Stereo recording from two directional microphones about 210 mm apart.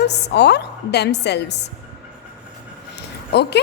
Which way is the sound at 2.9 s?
55° left (ahead or behind).